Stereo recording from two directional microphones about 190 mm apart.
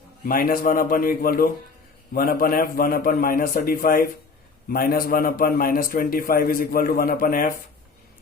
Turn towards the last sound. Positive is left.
turn(degrees=45)  # may be behind; listen again after turning